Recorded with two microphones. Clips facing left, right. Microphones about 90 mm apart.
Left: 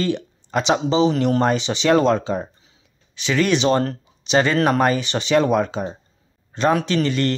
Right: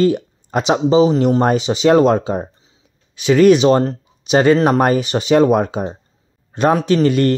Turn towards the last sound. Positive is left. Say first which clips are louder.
# right 6 dB
turn(degrees=-45)  # may be behind; listen again after turning